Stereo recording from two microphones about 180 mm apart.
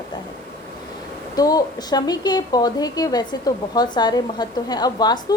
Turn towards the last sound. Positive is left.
turn(degrees=20)  # may be behind; listen again after turning